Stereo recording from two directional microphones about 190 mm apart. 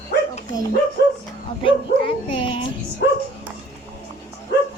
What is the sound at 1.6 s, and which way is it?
Speech, 25° left (ahead or behind).